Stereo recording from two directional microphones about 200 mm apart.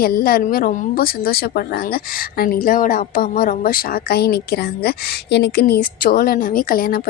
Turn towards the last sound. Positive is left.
turn(degrees=50)  # may be behind; listen again after turning